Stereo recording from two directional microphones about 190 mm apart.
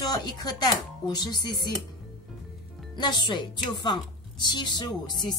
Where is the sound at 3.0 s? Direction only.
20° left (ahead or behind).